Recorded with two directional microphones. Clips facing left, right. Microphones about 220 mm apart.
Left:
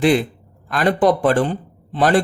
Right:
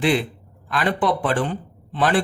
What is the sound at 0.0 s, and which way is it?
A man's voice, 40° left (ahead or behind).